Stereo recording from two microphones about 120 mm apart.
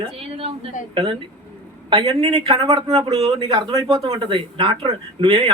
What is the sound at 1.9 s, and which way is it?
Speech, 50° right (ahead or behind).